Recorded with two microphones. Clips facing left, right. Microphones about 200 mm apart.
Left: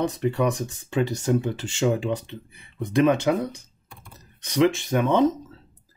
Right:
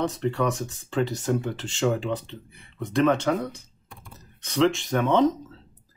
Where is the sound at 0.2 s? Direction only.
10° left (ahead or behind).